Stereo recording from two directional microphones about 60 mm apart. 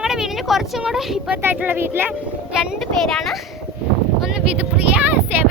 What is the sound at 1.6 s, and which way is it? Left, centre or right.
Speech, right.